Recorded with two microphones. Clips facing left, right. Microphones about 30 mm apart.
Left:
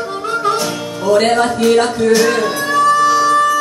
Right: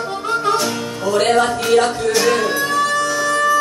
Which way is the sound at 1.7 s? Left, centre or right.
Centre.